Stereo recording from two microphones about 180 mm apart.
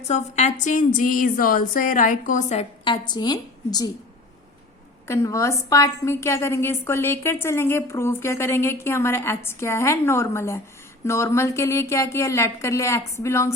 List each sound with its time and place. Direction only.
0.1 s a woman's voice: 40° left (ahead or behind)
2.8 s a woman's voice: 25° left (ahead or behind)
5.0 s a woman's voice: 15° left (ahead or behind)